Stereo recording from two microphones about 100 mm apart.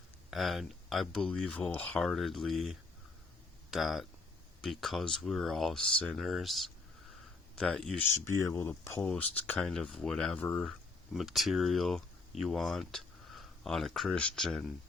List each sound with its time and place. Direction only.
0.3 s speech: centre (ahead or behind); by 2.0 s 15° left (ahead or behind)
2.0 s speech: centre (ahead or behind)
8.3 s speech: 35° left (ahead or behind)
9.0 s speech: 15° left (ahead or behind)